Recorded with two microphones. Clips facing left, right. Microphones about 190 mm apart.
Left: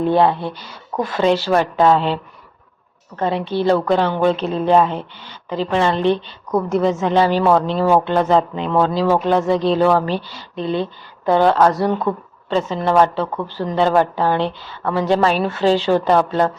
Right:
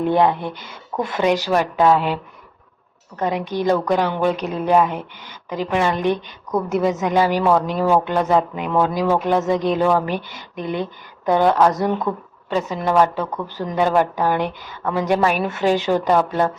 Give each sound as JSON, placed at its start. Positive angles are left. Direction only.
{"t": 0.0, "sound": "a woman's voice", "side_deg": -15}
{"t": 1.3, "sound": "a woman's voice", "side_deg": -10}
{"t": 3.2, "sound": "a woman's voice", "side_deg": -15}
{"t": 6.5, "sound": "a woman's voice", "side_deg": 0}
{"t": 6.8, "sound": "a woman's voice", "side_deg": -15}
{"t": 12.1, "sound": "a woman's voice", "side_deg": 0}
{"t": 12.5, "sound": "a woman's voice", "side_deg": -15}